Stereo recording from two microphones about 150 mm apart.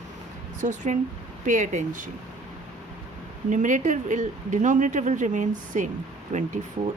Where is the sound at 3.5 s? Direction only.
55° right (ahead or behind).